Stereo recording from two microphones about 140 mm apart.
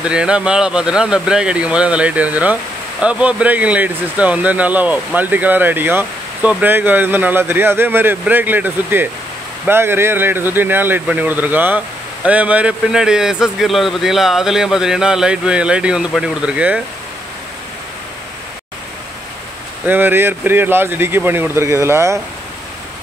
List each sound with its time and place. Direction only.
0.0 s speech: 5° right (ahead or behind)
19.9 s speech: 15° right (ahead or behind)